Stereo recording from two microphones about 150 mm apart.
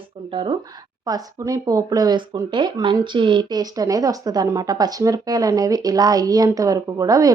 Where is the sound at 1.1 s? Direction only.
25° right (ahead or behind).